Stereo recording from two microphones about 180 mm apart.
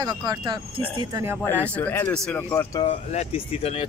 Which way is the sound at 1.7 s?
10° left (ahead or behind).